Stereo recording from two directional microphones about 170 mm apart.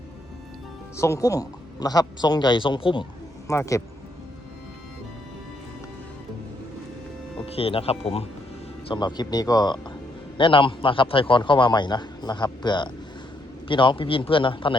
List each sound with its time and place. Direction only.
0.9 s speech: 15° left (ahead or behind)
3.5 s speech: 15° left (ahead or behind)
7.4 s a man's voice: 35° left (ahead or behind)
8.9 s a man's voice: 25° left (ahead or behind)